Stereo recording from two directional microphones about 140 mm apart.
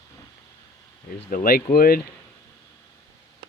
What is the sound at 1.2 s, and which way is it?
Speech, 90° left.